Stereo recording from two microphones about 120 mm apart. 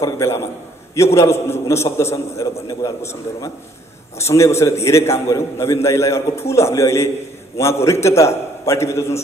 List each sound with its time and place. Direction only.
0.0 s a man's voice: 25° left (ahead or behind)